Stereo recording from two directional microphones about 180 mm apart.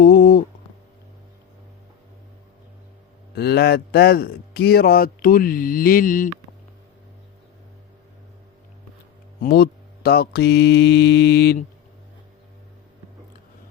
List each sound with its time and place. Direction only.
0.0 s a sound: 55° left (ahead or behind)
3.3 s speech: 60° left (ahead or behind)
9.4 s speech: 60° left (ahead or behind)